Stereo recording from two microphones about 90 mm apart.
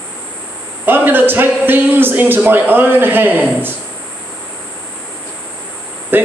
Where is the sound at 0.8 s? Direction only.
20° right (ahead or behind).